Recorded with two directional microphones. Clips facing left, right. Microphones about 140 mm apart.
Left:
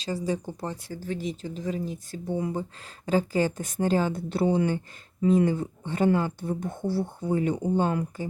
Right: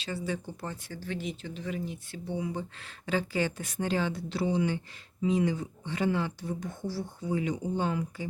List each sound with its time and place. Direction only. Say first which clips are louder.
0.3 s speech: left 5 dB; 35° left (ahead or behind)